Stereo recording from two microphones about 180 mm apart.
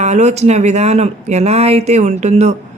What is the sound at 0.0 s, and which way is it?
Speech, 40° right (ahead or behind).